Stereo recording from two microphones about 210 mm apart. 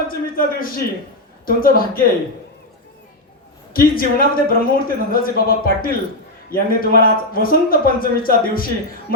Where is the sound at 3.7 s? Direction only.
45° left (ahead or behind).